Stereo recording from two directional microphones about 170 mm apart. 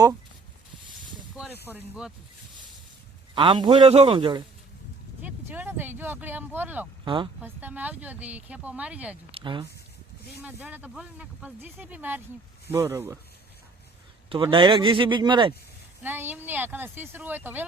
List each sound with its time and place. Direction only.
1.7 s speech: 5° right (ahead or behind)
3.3 s a man's voice: 30° right (ahead or behind)
5.2 s speech: 10° right (ahead or behind)
7.0 s speech: 30° right (ahead or behind)
7.4 s speech: 10° right (ahead or behind)
9.3 s a man's voice: 30° right (ahead or behind)
10.4 s speech: 10° right (ahead or behind)
14.3 s a man's voice: 30° right (ahead or behind)
16.0 s speech: 10° right (ahead or behind)